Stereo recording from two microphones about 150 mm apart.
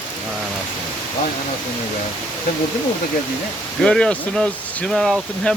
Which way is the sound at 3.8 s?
5° left (ahead or behind).